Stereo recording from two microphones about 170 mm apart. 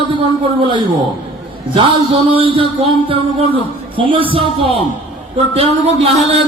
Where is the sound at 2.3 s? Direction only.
30° right (ahead or behind).